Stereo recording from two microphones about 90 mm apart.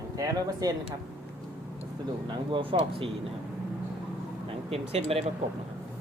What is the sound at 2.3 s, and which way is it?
Speech, 75° right (ahead or behind).